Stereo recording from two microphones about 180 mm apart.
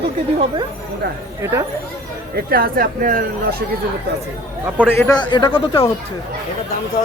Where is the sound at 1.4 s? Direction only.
15° right (ahead or behind).